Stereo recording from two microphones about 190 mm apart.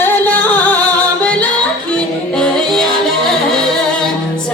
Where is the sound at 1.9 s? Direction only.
5° left (ahead or behind).